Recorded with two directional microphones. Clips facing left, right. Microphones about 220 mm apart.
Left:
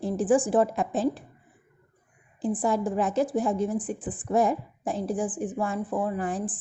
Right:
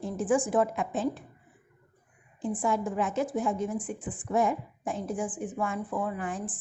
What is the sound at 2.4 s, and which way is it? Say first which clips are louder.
A woman's voice: left 3 dB; 35° left (ahead or behind).